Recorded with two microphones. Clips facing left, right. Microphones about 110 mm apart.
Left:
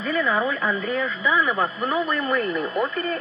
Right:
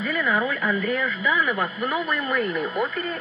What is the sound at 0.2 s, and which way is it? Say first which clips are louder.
Speech: left 1 dB; 30° left (ahead or behind).